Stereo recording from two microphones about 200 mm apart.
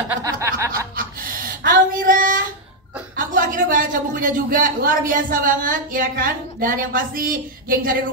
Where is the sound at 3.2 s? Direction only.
45° right (ahead or behind).